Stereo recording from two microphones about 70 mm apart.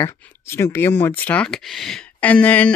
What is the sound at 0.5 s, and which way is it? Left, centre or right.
Speech, left.